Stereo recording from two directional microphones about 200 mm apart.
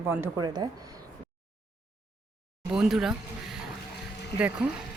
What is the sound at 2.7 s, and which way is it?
Speech, 5° right (ahead or behind).